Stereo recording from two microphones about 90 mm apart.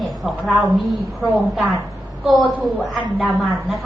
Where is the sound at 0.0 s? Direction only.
Centre (ahead or behind).